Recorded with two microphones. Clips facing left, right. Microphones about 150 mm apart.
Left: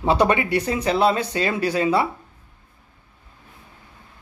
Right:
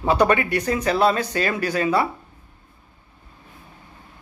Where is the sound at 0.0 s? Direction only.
25° left (ahead or behind).